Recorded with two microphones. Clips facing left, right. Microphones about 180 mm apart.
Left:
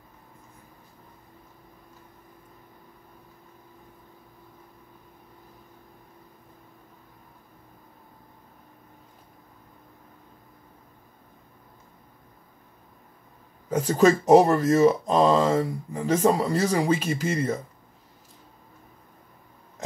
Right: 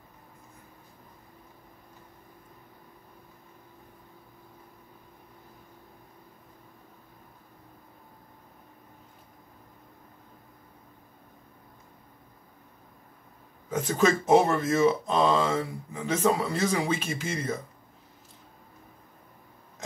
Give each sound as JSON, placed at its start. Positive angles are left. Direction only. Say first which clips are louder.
{"t": 13.7, "sound": "speech", "louder": "left 5 dB", "side_deg": 35}